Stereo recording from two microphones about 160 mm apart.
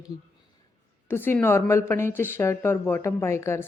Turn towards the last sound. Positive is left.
turn(degrees=15)  # may be behind; listen again after turning